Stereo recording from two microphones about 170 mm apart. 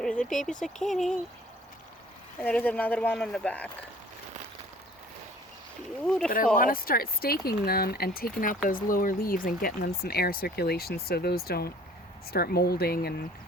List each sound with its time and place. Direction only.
0.0 s speech: 5° left (ahead or behind)
2.4 s speech: 10° left (ahead or behind)
6.0 s speech: centre (ahead or behind)
6.2 s speech: 55° left (ahead or behind)